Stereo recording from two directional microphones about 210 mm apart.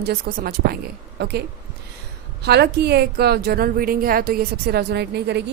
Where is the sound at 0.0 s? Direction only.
45° right (ahead or behind).